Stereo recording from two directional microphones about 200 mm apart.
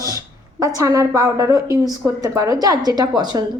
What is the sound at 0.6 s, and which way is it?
A woman's voice, 15° right (ahead or behind).